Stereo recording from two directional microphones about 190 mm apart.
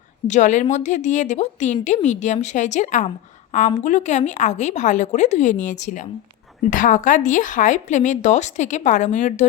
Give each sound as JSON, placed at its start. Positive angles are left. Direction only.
{"t": 0.3, "sound": "speech", "side_deg": 40}